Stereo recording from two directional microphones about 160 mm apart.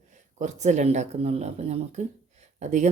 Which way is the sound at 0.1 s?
50° right (ahead or behind).